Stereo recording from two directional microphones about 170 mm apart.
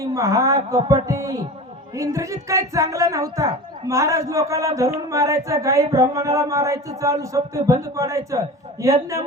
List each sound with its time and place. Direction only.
0.0 s a woman's voice: 20° right (ahead or behind)